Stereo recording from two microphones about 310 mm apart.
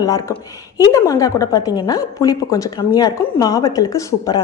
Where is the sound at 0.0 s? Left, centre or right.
Centre.